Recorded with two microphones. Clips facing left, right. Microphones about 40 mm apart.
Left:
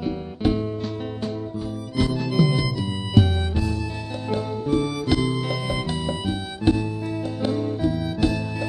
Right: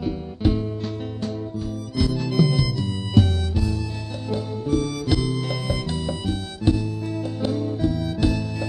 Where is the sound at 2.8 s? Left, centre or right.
Centre.